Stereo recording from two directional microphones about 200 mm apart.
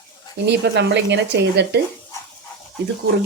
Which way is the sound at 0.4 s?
60° right (ahead or behind).